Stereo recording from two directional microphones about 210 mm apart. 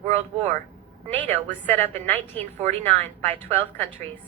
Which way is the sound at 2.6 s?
30° right (ahead or behind).